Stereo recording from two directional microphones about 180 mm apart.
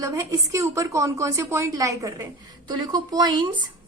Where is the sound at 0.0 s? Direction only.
20° right (ahead or behind).